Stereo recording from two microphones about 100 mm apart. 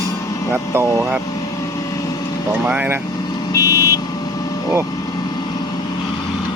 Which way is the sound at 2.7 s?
15° right (ahead or behind).